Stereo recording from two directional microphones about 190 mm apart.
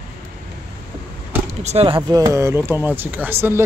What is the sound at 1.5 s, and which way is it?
Speech, 35° right (ahead or behind).